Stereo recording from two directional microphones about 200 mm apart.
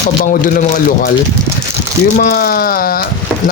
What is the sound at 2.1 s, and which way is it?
Speech, 50° left (ahead or behind).